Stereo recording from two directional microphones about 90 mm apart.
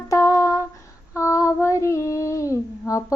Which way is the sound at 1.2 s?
35° left (ahead or behind).